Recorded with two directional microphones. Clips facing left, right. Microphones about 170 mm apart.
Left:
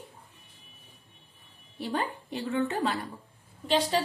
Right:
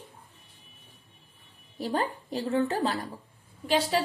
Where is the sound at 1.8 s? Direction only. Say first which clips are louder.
Right 2 dB; 40° right (ahead or behind).